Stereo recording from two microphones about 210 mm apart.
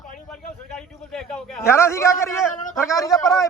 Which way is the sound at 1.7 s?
10° left (ahead or behind).